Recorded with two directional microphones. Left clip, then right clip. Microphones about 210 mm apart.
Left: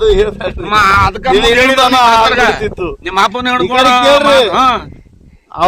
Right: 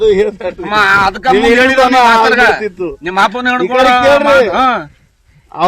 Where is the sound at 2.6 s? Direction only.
40° left (ahead or behind).